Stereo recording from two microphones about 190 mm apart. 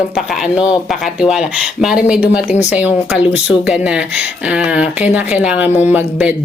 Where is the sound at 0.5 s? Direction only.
5° right (ahead or behind).